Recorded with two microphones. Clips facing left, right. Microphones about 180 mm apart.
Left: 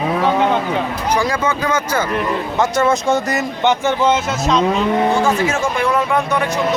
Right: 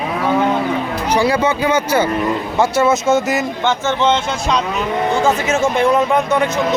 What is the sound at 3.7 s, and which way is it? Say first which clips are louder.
Speech: left 1 dB; 10° left (ahead or behind).